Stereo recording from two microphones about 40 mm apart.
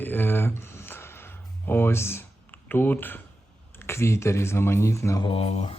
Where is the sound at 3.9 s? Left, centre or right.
Left.